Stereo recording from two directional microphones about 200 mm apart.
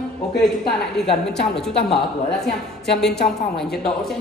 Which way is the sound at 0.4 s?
Centre (ahead or behind).